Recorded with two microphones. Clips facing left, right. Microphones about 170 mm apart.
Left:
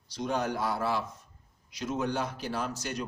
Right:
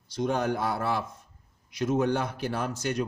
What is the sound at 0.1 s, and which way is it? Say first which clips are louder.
Speech: right 4 dB; 50° right (ahead or behind).